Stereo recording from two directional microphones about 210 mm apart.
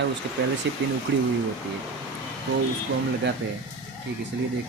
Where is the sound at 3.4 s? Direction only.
55° right (ahead or behind).